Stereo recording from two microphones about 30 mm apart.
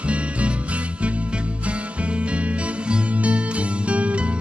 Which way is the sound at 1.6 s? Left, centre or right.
Right.